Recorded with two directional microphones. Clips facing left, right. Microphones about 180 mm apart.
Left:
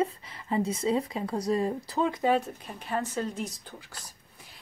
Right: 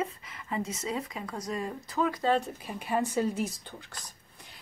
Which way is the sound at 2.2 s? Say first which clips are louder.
Left 2 dB; 5° left (ahead or behind).